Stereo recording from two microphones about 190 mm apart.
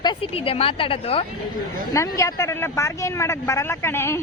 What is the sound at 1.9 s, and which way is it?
Speech, 15° left (ahead or behind).